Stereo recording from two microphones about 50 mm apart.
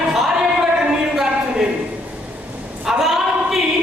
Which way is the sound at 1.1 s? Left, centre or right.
Centre.